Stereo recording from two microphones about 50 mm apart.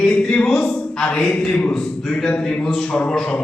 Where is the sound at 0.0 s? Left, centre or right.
Centre.